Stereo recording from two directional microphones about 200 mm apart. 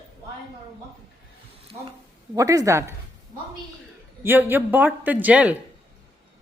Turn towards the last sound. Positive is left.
turn(degrees=-5)  # may be behind; listen again after turning